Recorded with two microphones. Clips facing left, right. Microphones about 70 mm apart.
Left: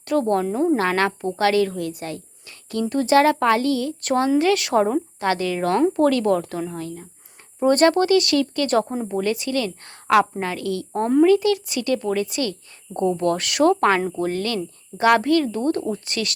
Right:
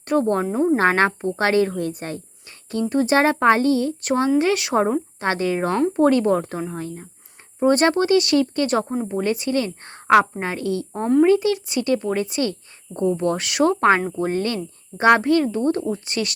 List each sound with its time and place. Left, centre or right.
0.0 s a woman's voice: right
7.6 s speech: centre
8.8 s speech: centre
9.0 s speech: right
14.2 s speech: right